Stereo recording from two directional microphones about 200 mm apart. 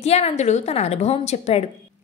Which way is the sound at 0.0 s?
30° left (ahead or behind).